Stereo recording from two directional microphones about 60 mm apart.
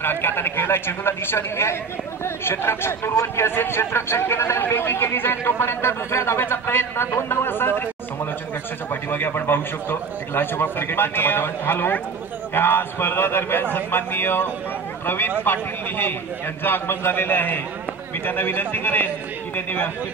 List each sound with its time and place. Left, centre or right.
0.0 s a man's voice: left
9.1 s a man's voice: left